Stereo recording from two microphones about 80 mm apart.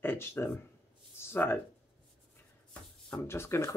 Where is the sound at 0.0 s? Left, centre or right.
Left.